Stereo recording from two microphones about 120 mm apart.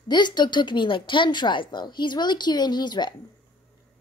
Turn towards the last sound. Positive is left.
turn(degrees=35)  # may be behind; listen again after turning